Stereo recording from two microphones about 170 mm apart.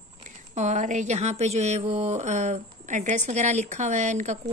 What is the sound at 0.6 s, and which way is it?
Speech, 45° right (ahead or behind).